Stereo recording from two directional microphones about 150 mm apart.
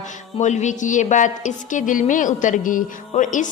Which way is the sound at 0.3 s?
50° left (ahead or behind).